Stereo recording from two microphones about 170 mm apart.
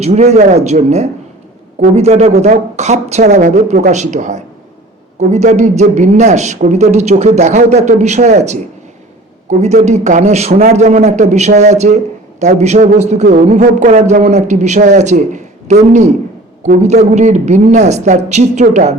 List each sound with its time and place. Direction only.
0.0 s a man's voice: 40° right (ahead or behind)